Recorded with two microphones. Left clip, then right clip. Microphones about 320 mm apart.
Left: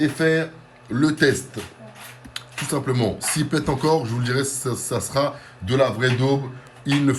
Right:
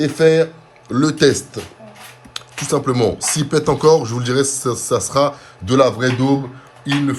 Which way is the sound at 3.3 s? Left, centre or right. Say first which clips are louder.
Right 7 dB; centre.